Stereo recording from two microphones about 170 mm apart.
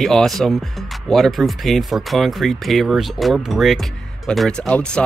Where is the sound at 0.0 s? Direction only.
Centre (ahead or behind).